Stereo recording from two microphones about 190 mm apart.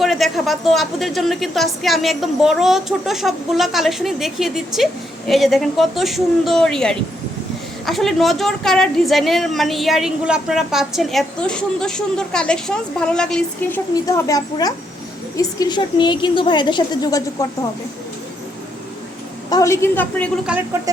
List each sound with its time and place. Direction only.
0.0 s a woman's voice: centre (ahead or behind)
14.3 s a woman's voice: 20° left (ahead or behind)
19.5 s a woman's voice: 15° left (ahead or behind)